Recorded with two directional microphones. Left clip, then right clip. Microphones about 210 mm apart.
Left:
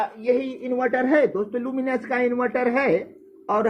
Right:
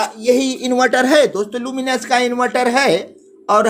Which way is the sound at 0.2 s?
35° right (ahead or behind).